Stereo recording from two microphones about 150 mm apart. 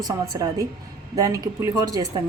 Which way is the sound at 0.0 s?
25° right (ahead or behind).